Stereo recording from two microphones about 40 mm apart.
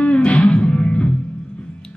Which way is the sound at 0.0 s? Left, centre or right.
Left.